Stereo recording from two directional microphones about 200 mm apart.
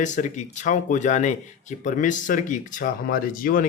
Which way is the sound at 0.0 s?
40° left (ahead or behind).